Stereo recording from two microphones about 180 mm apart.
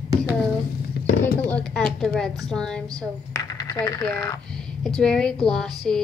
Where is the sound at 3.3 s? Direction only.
20° left (ahead or behind).